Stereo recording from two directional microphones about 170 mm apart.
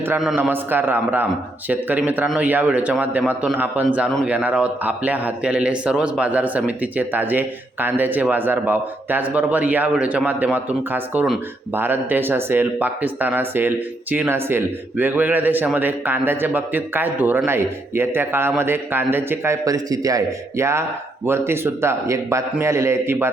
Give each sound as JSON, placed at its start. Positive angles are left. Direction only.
{"t": 0.5, "sound": "a man's voice", "side_deg": -10}